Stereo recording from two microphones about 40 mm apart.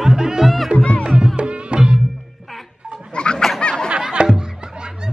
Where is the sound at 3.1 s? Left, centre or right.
Left.